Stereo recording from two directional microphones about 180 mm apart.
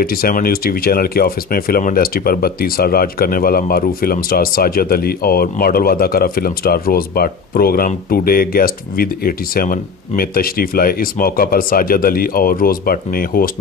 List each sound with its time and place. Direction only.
0.0 s speech: 55° left (ahead or behind)